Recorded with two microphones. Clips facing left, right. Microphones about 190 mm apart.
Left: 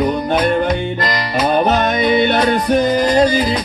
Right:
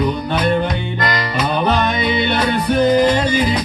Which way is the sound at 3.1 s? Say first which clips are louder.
Left 4 dB; 40° left (ahead or behind).